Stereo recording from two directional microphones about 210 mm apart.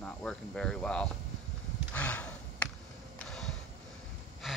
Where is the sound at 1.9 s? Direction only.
5° left (ahead or behind).